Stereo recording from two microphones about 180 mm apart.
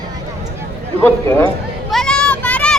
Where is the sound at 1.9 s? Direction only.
5° left (ahead or behind).